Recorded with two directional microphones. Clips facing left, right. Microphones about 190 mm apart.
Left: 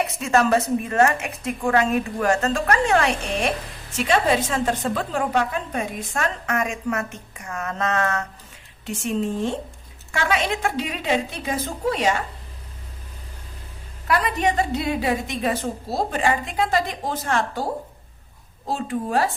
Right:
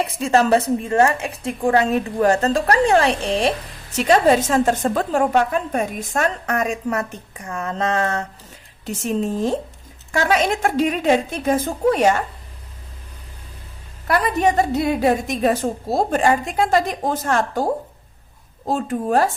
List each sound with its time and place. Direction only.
0.0 s a woman's voice: 30° right (ahead or behind); by 12.1 s 50° right (ahead or behind)
14.1 s a woman's voice: 40° right (ahead or behind)